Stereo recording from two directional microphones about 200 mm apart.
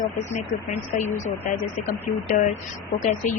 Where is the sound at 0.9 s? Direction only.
40° left (ahead or behind).